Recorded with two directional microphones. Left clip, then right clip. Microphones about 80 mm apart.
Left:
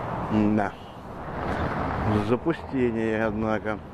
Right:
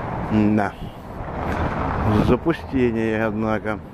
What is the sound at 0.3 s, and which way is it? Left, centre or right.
Speech, centre.